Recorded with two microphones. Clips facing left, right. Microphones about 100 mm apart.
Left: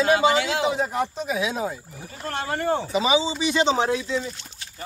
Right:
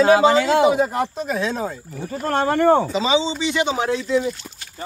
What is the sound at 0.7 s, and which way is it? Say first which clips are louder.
Speech: right 5 dB; centre (ahead or behind).